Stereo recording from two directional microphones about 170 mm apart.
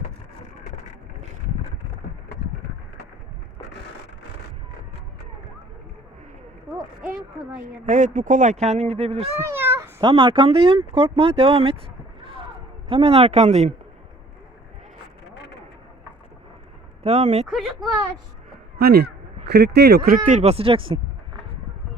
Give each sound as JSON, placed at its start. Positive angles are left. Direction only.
{"t": 7.9, "sound": "speech", "side_deg": -45}
{"t": 9.4, "sound": "a sound", "side_deg": -15}
{"t": 10.0, "sound": "speech", "side_deg": -30}
{"t": 12.9, "sound": "speech", "side_deg": -35}
{"t": 17.0, "sound": "speech", "side_deg": -40}
{"t": 18.8, "sound": "speech", "side_deg": -65}
{"t": 20.2, "sound": "speech", "side_deg": -45}